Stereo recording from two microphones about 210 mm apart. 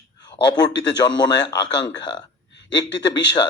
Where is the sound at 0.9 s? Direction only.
20° left (ahead or behind).